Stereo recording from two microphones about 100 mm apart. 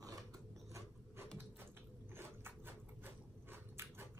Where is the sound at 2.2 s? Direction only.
20° right (ahead or behind).